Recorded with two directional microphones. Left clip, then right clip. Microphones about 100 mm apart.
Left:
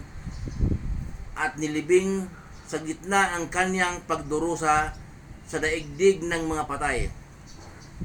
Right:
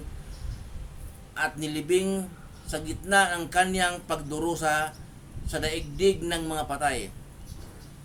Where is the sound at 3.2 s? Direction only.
40° right (ahead or behind).